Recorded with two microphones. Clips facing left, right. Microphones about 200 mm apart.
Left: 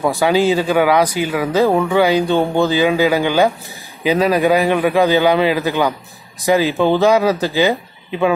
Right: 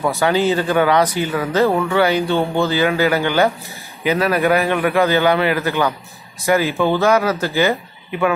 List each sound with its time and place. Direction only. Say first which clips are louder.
0.0 s speech: left 2 dB; 15° left (ahead or behind)